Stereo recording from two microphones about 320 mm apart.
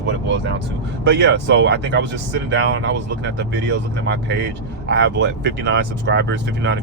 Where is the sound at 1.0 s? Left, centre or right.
Right.